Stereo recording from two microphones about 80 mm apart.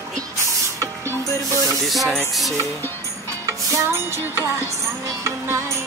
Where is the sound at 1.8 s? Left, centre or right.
Centre.